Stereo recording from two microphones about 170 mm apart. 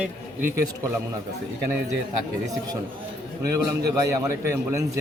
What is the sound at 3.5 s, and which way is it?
A man's voice, 20° right (ahead or behind).